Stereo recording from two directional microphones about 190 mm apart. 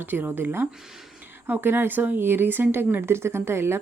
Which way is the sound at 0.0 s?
10° right (ahead or behind).